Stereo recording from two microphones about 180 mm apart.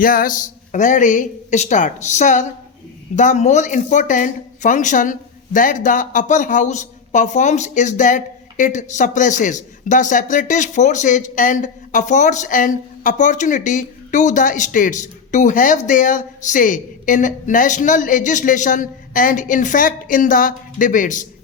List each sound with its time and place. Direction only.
0.0 s speech: 50° left (ahead or behind)